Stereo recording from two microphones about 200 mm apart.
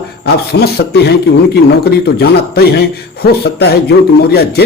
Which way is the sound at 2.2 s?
50° left (ahead or behind).